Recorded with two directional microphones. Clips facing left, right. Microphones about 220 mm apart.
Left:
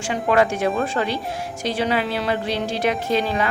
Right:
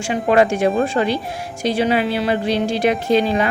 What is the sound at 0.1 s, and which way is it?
A woman's voice, 20° right (ahead or behind).